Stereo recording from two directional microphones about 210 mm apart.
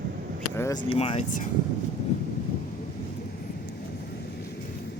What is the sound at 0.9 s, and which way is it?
Speech, 25° left (ahead or behind).